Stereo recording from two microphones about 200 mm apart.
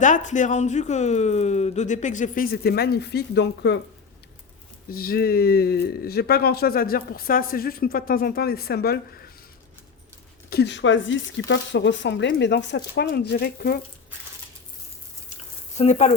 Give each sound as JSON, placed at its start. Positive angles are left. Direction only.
{"t": 0.0, "sound": "a man's voice", "side_deg": 40}
{"t": 4.9, "sound": "speech", "side_deg": 50}
{"t": 10.5, "sound": "speech", "side_deg": 60}
{"t": 15.8, "sound": "a man's voice", "side_deg": 35}